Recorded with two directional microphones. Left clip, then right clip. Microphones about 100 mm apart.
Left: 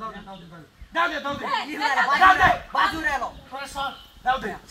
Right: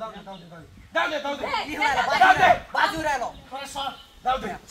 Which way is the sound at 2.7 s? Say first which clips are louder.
Left 1 dB; 25° right (ahead or behind).